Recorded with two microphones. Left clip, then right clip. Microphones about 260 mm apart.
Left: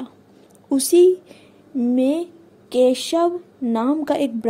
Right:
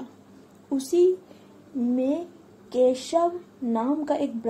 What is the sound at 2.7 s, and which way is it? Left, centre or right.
A woman's voice, left.